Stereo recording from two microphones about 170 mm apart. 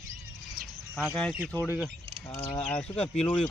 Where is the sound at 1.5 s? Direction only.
15° left (ahead or behind).